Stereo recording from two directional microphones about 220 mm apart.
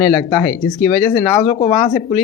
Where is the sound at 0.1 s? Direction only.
20° left (ahead or behind).